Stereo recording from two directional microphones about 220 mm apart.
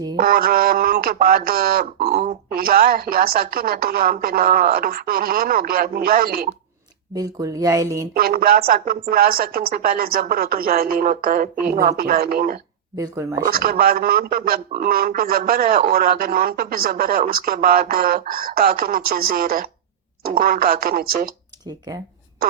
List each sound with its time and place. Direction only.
0.2 s a man's voice: 40° right (ahead or behind)
2.0 s speech: 30° right (ahead or behind)
2.6 s a man's voice: 45° right (ahead or behind)
7.2 s speech: 15° right (ahead or behind)
8.1 s a man's voice: 40° right (ahead or behind)
13.0 s speech: 15° right (ahead or behind)
13.4 s a man's voice: 40° right (ahead or behind)